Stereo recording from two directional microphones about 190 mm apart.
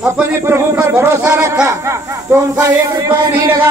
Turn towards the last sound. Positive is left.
turn(degrees=-20)  # may be behind; listen again after turning